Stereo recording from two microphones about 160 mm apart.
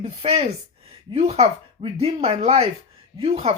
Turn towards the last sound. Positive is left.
turn(degrees=-40)  # may be behind; listen again after turning